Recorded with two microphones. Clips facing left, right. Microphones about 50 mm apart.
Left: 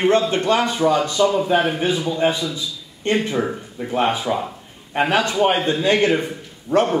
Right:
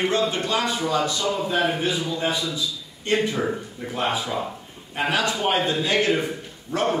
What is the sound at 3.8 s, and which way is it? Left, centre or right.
A man's voice, left.